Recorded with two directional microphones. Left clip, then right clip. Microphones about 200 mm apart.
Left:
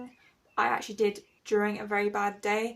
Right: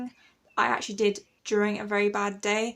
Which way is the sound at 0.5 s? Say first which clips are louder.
Right 2 dB; 45° right (ahead or behind).